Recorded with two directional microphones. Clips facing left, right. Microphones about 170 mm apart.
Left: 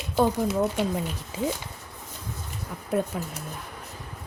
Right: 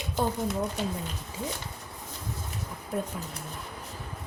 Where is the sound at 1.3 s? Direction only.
90° left.